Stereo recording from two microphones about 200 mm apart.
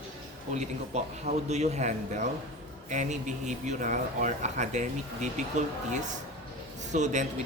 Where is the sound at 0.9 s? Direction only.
35° right (ahead or behind).